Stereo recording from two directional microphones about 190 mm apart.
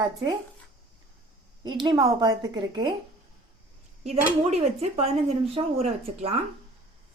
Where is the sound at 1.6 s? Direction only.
25° right (ahead or behind).